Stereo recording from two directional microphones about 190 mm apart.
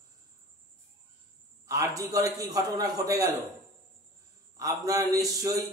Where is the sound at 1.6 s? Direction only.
15° right (ahead or behind).